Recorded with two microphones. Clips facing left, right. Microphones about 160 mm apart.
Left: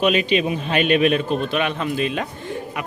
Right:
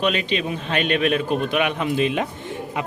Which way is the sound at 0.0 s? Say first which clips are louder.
Left 4 dB; 10° left (ahead or behind).